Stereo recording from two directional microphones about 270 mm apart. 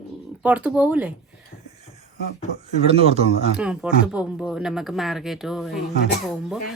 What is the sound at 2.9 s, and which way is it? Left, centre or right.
Speech, right.